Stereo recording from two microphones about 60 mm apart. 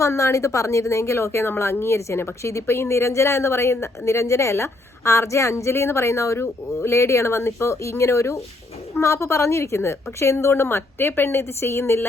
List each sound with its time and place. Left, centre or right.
0.0 s a woman's voice: left
6.4 s a woman's voice: left